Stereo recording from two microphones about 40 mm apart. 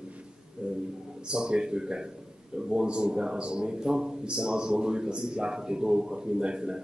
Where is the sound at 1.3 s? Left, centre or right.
Right.